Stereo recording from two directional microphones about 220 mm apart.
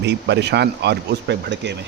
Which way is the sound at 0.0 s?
50° right (ahead or behind).